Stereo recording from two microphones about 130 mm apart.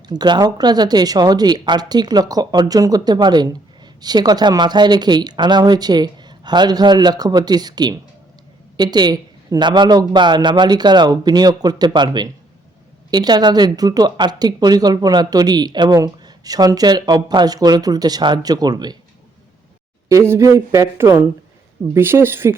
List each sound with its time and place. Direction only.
0.1 s speech: 30° right (ahead or behind)
20.1 s speech: 20° right (ahead or behind)